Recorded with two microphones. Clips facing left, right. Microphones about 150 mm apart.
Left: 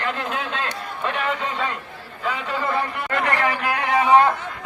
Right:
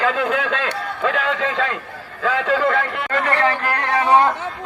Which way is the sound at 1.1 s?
90° right.